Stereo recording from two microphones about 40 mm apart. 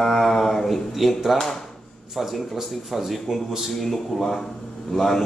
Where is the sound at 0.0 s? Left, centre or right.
Centre.